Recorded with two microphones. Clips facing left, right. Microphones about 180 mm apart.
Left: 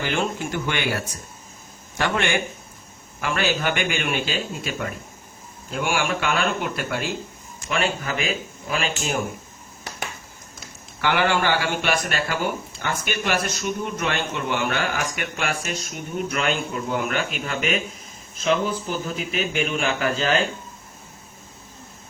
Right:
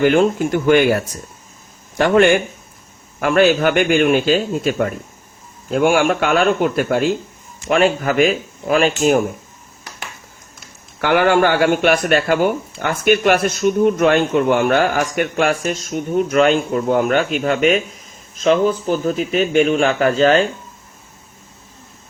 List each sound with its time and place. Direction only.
0.0 s speech: 50° right (ahead or behind)
2.0 s speech: 40° right (ahead or behind)
11.0 s speech: 50° right (ahead or behind)